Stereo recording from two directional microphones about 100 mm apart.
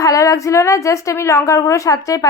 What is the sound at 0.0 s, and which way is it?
A woman's voice, 35° left (ahead or behind).